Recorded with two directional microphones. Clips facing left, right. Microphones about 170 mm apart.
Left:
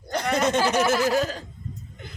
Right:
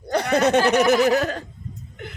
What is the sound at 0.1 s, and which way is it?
Speech, 60° right (ahead or behind).